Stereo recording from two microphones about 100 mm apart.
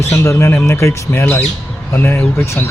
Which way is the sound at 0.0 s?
25° left (ahead or behind).